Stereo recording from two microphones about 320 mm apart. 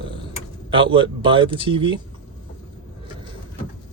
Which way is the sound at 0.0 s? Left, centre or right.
Centre.